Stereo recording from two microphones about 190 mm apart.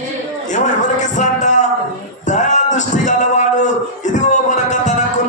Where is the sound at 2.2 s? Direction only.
40° left (ahead or behind).